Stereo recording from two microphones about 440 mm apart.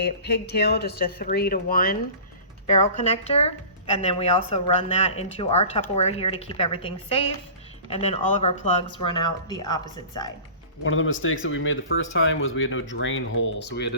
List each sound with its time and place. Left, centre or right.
0.0 s speech: left
10.8 s speech: left